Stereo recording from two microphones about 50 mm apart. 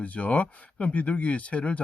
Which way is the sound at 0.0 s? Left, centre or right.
Left.